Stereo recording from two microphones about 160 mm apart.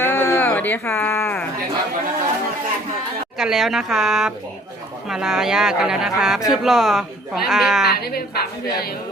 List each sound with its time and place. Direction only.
0.0 s a sound: 15° left (ahead or behind)
3.3 s speech: centre (ahead or behind)
8.6 s speech: 75° left (ahead or behind)